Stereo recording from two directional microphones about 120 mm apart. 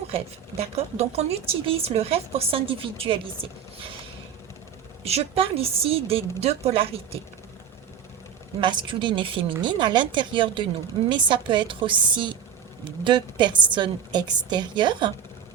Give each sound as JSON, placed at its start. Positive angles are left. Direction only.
{"t": 0.1, "sound": "a woman's voice", "side_deg": -55}
{"t": 5.0, "sound": "a woman's voice", "side_deg": -55}
{"t": 8.6, "sound": "a woman's voice", "side_deg": -40}